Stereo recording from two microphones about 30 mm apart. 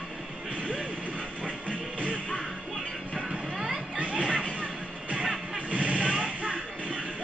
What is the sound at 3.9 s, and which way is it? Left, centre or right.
Music, right.